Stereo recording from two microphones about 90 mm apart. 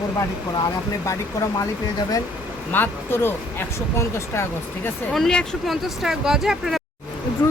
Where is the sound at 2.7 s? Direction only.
25° left (ahead or behind).